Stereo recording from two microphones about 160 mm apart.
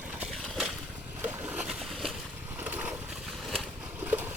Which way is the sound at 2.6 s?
10° right (ahead or behind).